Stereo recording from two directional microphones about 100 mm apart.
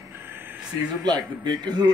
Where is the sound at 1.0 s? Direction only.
45° right (ahead or behind).